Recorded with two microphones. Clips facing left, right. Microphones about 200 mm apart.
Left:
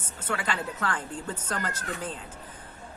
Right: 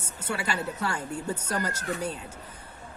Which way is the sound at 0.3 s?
10° right (ahead or behind).